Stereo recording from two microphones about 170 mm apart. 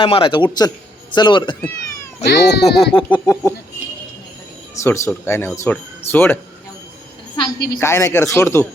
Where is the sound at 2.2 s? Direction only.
90° left.